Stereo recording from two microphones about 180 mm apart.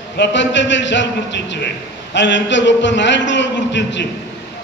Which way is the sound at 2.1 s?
90° left.